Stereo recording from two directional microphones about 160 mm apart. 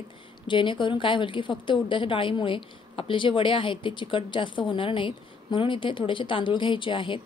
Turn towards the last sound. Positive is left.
turn(degrees=30)  # may be behind; listen again after turning